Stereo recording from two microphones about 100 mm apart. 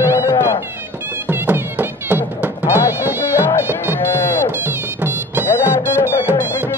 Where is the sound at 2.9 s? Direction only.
20° right (ahead or behind).